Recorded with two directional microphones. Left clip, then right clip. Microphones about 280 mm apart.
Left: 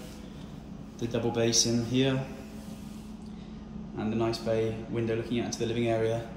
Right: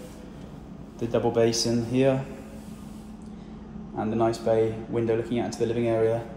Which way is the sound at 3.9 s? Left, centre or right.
Centre.